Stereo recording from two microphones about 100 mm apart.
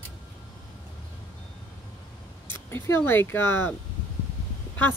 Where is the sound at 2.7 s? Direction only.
25° left (ahead or behind).